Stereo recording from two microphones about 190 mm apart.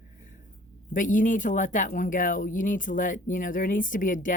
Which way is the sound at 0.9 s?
45° left (ahead or behind).